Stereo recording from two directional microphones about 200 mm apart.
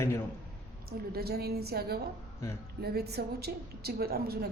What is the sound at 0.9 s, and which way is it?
A woman's voice, 50° right (ahead or behind).